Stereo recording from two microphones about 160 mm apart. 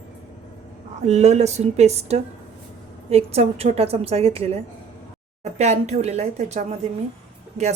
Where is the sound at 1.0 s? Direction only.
45° right (ahead or behind).